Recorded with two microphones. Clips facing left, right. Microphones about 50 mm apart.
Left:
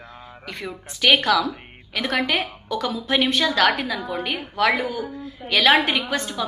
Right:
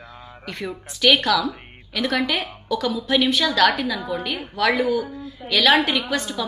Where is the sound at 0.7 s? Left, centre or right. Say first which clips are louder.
Even; left.